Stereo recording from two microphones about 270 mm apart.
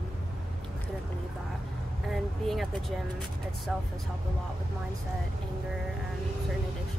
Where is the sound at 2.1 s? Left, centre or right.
Centre.